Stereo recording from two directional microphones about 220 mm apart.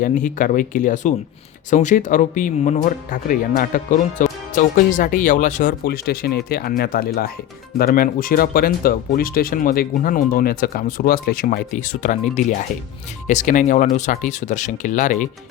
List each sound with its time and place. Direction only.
0.0 s speech: 35° left (ahead or behind)